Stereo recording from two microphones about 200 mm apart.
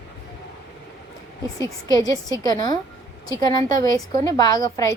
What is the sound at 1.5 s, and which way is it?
A woman's voice, 20° left (ahead or behind).